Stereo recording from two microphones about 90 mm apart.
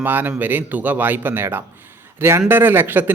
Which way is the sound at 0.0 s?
20° right (ahead or behind).